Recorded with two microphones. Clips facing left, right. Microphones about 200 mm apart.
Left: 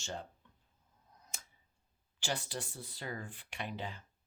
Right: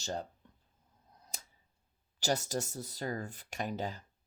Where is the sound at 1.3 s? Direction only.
35° right (ahead or behind).